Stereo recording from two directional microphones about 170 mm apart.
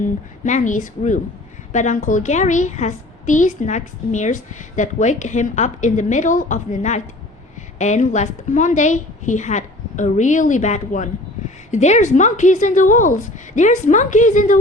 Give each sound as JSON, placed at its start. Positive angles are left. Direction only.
{"t": 0.0, "sound": "a woman's voice", "side_deg": 45}